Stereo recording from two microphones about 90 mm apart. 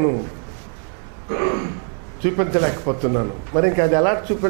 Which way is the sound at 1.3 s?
20° right (ahead or behind).